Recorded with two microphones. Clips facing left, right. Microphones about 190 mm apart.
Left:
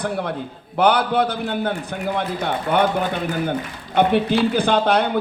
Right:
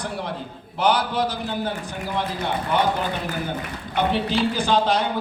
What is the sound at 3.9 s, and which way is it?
A man's voice, 55° left (ahead or behind).